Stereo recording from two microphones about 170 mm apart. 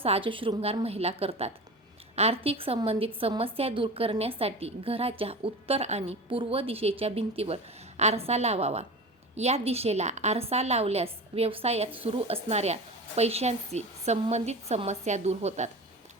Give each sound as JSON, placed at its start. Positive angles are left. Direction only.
{"t": 0.0, "sound": "a woman's voice", "side_deg": -35}